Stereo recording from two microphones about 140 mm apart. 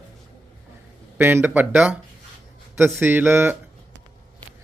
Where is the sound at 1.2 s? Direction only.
15° right (ahead or behind).